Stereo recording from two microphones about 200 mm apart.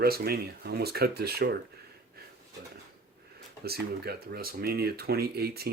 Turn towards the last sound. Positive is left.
turn(degrees=-50)  # may be behind; listen again after turning